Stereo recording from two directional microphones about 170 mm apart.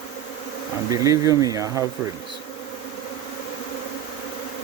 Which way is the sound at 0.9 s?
20° right (ahead or behind).